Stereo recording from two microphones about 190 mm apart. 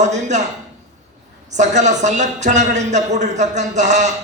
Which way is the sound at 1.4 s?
40° right (ahead or behind).